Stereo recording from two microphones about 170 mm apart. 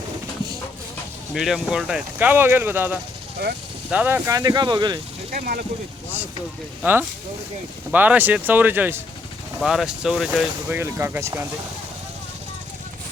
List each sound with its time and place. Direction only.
1.3 s speech: centre (ahead or behind); by 4.9 s 25° right (ahead or behind)
5.3 s speech: 60° right (ahead or behind)
7.9 s speech: 10° right (ahead or behind)
9.6 s speech: centre (ahead or behind)
10.8 s speech: 15° right (ahead or behind)